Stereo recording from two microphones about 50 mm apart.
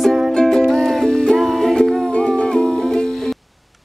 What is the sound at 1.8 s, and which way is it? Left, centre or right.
Music, centre.